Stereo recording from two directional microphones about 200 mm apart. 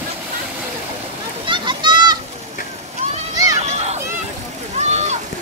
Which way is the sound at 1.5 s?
20° right (ahead or behind).